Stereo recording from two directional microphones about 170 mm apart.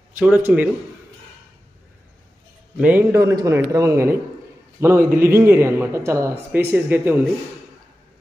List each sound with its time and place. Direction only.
0.1 s speech: 10° right (ahead or behind)
2.8 s a man's voice: 10° right (ahead or behind)